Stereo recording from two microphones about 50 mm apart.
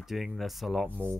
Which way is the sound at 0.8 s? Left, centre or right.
Right.